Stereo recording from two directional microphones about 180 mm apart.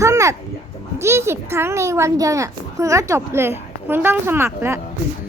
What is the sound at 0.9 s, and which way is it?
A child's voice, 15° right (ahead or behind).